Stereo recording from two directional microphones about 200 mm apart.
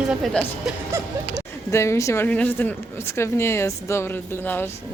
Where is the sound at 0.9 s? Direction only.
15° right (ahead or behind).